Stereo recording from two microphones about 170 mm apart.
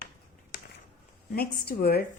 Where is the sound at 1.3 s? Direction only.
65° left (ahead or behind).